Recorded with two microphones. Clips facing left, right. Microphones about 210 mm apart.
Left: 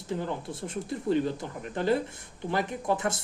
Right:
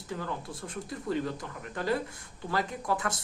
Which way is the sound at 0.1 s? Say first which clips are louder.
Left 4 dB; 25° left (ahead or behind).